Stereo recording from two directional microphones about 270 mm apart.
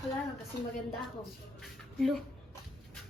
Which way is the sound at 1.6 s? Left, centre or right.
Centre.